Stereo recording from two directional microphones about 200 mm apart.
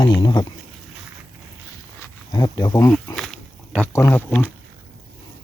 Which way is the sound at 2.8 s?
5° left (ahead or behind).